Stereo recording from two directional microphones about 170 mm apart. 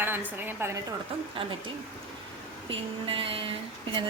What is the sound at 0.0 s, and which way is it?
Speech, 10° right (ahead or behind).